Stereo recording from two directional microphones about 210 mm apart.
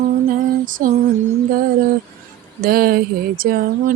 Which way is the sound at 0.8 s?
40° right (ahead or behind).